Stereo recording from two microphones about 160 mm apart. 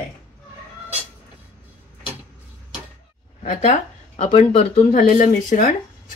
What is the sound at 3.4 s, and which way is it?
Speech, 50° left (ahead or behind).